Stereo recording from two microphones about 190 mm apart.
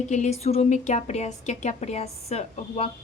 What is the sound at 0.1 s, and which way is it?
Speech, 35° left (ahead or behind).